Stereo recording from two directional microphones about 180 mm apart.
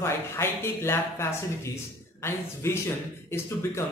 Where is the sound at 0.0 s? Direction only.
15° left (ahead or behind).